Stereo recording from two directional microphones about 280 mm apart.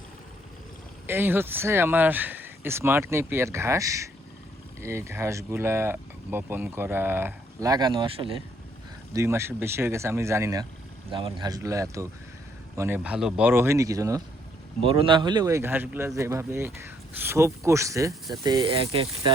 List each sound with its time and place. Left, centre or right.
1.0 s speech: centre